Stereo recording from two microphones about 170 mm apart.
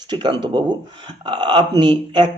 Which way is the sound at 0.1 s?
25° right (ahead or behind).